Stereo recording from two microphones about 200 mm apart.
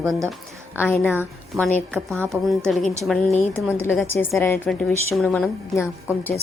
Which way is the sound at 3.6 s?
10° right (ahead or behind).